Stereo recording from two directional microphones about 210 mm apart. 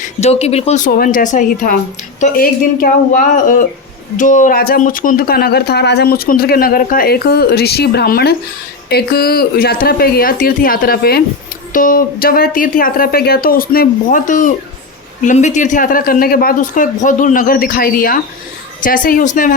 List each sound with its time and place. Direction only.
0.2 s speech: 30° left (ahead or behind)
0.9 s speech: 45° left (ahead or behind)